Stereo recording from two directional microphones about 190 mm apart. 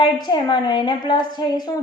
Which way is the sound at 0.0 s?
20° left (ahead or behind).